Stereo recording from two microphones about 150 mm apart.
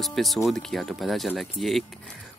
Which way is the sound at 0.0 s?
Centre (ahead or behind).